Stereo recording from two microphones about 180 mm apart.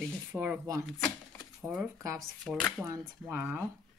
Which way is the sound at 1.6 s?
10° right (ahead or behind).